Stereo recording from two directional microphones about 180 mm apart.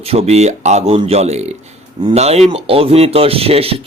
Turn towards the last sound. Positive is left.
turn(degrees=-35)  # may be behind; listen again after turning